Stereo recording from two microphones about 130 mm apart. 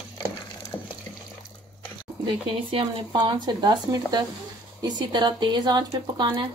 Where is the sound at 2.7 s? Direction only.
40° right (ahead or behind).